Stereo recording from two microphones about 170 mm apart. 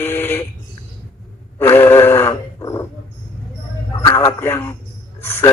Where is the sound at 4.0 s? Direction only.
20° left (ahead or behind).